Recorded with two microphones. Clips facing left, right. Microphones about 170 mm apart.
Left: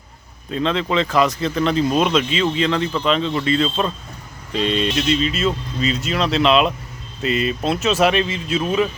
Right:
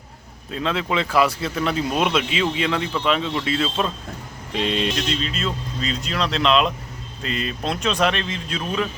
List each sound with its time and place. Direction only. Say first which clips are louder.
0.5 s speech: left 4 dB; 5° right (ahead or behind)
4.9 s speech: left 6 dB; 5° left (ahead or behind)